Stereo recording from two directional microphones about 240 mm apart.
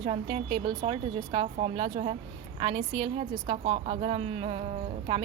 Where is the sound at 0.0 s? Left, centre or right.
Right.